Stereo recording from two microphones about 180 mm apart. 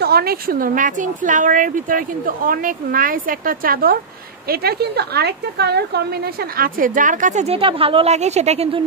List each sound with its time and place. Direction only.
0.0 s a woman's voice: 60° right (ahead or behind); by 8.8 s 35° right (ahead or behind)